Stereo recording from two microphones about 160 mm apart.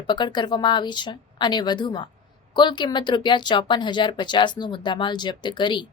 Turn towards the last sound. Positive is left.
turn(degrees=30)  # may be behind; listen again after turning